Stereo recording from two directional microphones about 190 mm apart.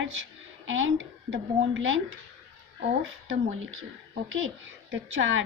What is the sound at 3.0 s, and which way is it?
A woman's voice, 90° right.